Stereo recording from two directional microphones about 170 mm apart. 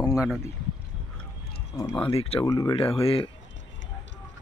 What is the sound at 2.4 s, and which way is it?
Speech, 20° left (ahead or behind).